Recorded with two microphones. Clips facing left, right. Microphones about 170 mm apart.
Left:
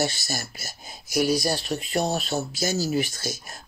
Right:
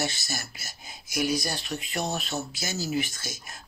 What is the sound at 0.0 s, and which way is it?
Speech, 35° left (ahead or behind).